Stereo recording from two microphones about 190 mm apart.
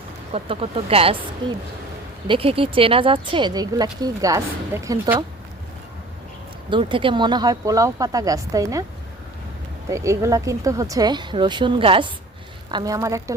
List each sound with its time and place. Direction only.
0.3 s speech: 30° right (ahead or behind)
2.2 s a woman's voice: 30° right (ahead or behind); by 5.2 s 10° right (ahead or behind)
6.7 s a woman's voice: 25° right (ahead or behind)
9.9 s a woman's voice: 15° right (ahead or behind)